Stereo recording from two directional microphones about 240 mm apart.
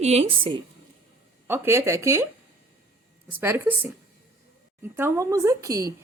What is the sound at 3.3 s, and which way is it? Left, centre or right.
Speech, centre.